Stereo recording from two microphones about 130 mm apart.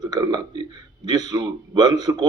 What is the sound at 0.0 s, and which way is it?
A man's voice, 35° right (ahead or behind).